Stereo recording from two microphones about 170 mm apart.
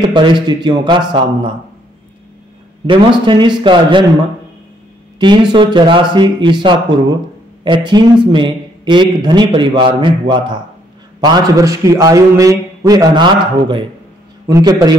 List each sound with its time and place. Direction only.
0.0 s a man's voice: 30° right (ahead or behind)
2.9 s a man's voice: 25° right (ahead or behind)
5.2 s a man's voice: 25° right (ahead or behind)